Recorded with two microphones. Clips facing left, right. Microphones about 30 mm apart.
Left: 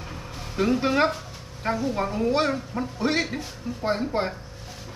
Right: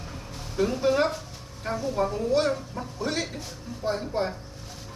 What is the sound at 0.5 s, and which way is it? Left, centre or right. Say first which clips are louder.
Speech: left 1 dB; left.